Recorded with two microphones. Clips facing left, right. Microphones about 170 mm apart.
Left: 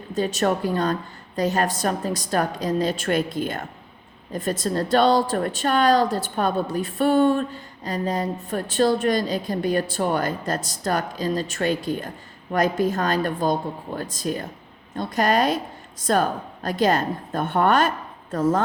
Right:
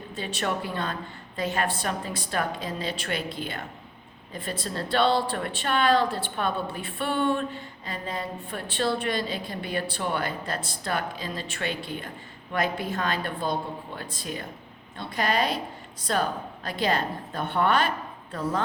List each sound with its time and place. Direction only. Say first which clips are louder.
0.1 s a woman's voice: left 8 dB; 40° left (ahead or behind)